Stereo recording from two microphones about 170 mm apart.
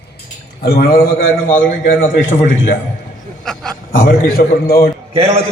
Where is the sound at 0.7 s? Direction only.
65° left (ahead or behind).